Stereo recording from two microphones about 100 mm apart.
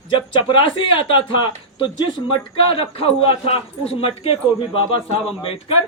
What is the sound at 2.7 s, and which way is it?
A man's voice, 70° left (ahead or behind).